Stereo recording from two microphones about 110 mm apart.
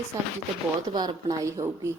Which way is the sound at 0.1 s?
25° right (ahead or behind).